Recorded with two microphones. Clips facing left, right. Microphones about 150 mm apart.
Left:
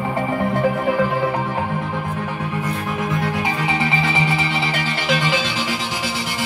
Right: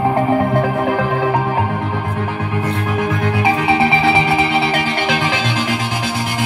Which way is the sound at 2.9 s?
70° right (ahead or behind).